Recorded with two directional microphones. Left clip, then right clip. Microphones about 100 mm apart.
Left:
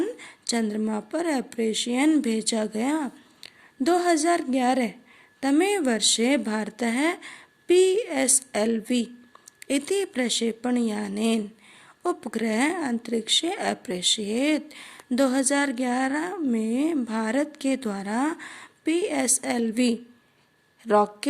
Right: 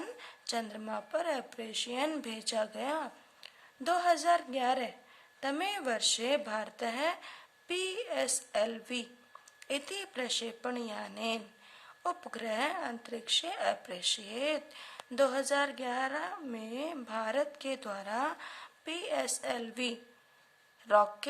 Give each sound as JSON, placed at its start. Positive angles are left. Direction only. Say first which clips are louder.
{"t": 0.2, "sound": "a woman's voice", "louder": "left 8 dB", "side_deg": 40}